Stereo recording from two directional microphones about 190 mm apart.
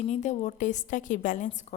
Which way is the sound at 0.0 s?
40° left (ahead or behind).